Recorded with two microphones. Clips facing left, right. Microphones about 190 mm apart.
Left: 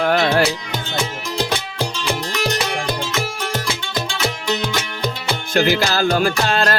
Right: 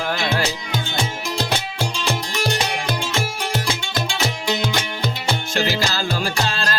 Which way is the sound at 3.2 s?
30° right (ahead or behind).